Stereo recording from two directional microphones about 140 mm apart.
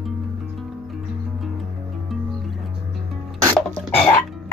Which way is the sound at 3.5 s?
10° left (ahead or behind).